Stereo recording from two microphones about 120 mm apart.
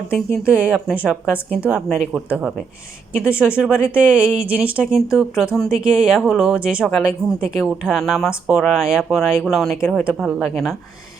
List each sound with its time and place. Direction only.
0.5 s speech: 10° right (ahead or behind)
4.9 s speech: centre (ahead or behind)
8.3 s speech: 10° right (ahead or behind)